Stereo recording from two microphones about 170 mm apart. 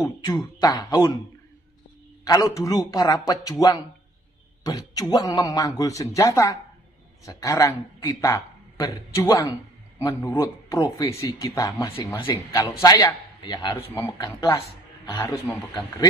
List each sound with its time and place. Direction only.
0.0 s speech: 25° left (ahead or behind)
2.2 s speech: 20° left (ahead or behind)